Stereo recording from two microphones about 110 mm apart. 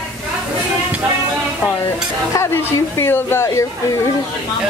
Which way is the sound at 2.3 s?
25° left (ahead or behind).